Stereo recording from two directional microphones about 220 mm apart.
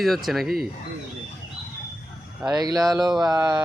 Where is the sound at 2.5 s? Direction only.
15° right (ahead or behind).